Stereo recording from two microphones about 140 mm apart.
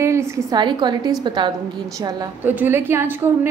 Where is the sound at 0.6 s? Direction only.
35° right (ahead or behind).